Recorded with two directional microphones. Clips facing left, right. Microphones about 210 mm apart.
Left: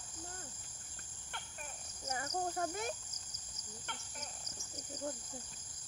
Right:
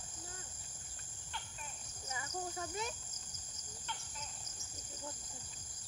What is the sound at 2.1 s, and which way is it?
Cricket, 45° left (ahead or behind).